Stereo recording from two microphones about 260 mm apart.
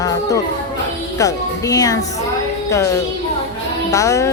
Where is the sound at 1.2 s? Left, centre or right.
Centre.